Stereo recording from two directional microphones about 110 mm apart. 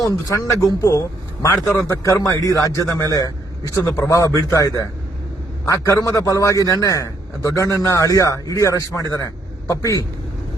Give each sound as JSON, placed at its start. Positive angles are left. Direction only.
{"t": 0.0, "sound": "a man's voice", "side_deg": 30}